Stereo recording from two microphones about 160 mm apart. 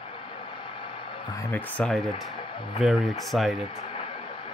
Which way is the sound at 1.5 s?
10° left (ahead or behind).